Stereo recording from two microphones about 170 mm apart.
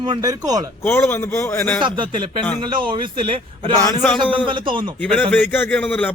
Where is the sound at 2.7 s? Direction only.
30° right (ahead or behind).